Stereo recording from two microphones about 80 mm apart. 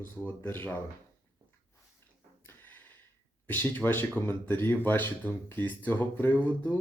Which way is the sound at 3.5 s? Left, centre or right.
Left.